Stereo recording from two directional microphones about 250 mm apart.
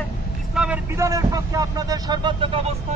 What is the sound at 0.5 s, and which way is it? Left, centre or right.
Speech, centre.